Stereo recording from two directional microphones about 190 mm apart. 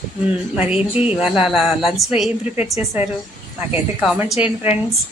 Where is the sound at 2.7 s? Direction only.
35° left (ahead or behind).